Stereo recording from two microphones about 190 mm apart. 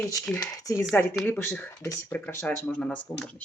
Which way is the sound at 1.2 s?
10° left (ahead or behind).